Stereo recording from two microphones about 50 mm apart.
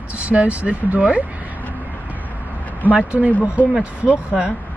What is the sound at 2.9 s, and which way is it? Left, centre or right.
Speech, right.